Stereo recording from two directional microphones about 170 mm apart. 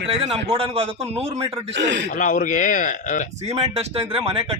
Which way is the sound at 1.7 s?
90° right.